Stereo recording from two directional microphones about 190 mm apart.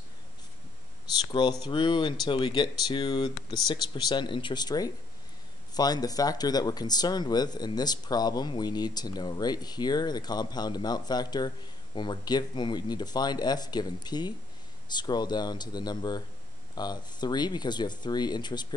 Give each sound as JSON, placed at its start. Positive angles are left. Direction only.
{"t": 1.3, "sound": "speech", "side_deg": 20}